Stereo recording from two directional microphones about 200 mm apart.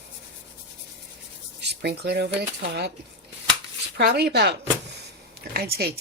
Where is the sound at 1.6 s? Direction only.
55° right (ahead or behind).